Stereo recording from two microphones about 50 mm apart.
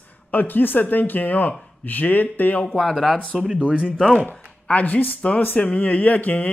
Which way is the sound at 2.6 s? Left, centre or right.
Centre.